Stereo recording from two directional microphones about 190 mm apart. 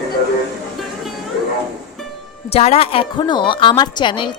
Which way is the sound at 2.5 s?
30° left (ahead or behind).